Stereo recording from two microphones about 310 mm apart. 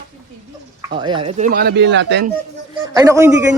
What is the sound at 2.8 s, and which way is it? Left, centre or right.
Speech, centre.